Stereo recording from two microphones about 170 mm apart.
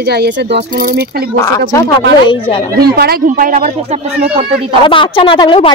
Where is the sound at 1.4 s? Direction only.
20° left (ahead or behind).